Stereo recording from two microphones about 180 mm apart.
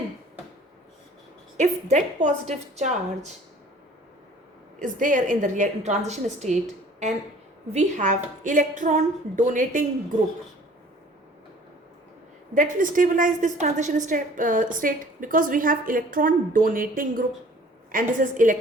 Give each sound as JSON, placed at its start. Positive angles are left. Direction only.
{"t": 1.5, "sound": "a woman's voice", "side_deg": -40}
{"t": 4.8, "sound": "a woman's voice", "side_deg": -45}
{"t": 7.7, "sound": "a woman's voice", "side_deg": -40}
{"t": 12.5, "sound": "a woman's voice", "side_deg": -45}